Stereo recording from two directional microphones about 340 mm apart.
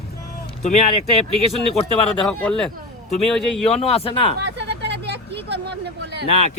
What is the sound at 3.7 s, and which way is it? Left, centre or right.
Speech, centre.